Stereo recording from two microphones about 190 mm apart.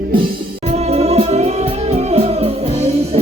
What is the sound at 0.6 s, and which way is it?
Music, 35° right (ahead or behind).